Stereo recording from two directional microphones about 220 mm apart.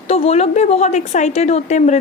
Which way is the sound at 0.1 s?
30° left (ahead or behind).